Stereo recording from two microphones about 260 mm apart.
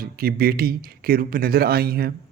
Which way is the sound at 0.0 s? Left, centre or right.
Right.